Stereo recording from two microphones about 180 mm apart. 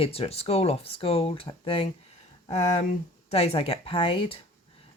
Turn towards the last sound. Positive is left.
turn(degrees=30)  # may be behind; listen again after turning